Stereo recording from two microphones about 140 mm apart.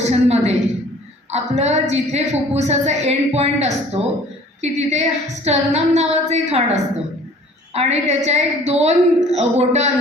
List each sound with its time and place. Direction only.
0.0 s a woman's voice: 50° right (ahead or behind)